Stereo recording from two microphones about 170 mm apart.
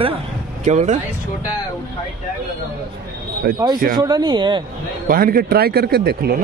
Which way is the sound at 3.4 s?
60° right (ahead or behind).